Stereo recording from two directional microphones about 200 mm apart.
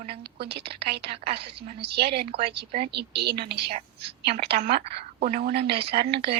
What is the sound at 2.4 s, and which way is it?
Speech, 30° right (ahead or behind).